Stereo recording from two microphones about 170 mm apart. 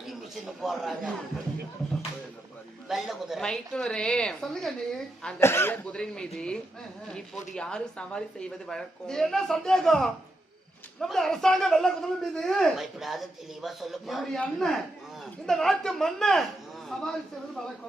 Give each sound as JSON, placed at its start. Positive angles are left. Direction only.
{"t": 0.6, "sound": "a man's voice", "side_deg": 0}
{"t": 2.9, "sound": "a man's voice", "side_deg": 0}
{"t": 5.4, "sound": "a man's voice", "side_deg": 15}